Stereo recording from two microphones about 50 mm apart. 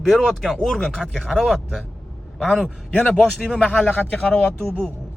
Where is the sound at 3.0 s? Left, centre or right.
Centre.